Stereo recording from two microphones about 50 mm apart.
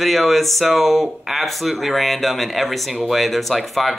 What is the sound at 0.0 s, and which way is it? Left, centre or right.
Speech, centre.